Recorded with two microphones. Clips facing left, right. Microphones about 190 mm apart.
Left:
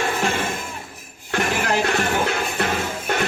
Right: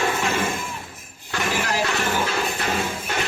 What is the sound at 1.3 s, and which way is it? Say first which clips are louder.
Music: left 3 dB; 60° left (ahead or behind).